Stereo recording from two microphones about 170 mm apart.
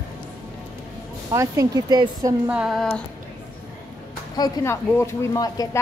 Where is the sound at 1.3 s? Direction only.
20° right (ahead or behind).